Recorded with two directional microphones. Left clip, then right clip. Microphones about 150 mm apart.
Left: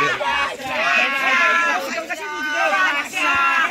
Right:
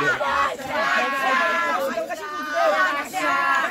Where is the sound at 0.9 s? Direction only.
20° right (ahead or behind).